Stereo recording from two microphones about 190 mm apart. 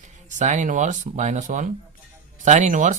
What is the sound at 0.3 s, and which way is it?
Speech, 40° right (ahead or behind).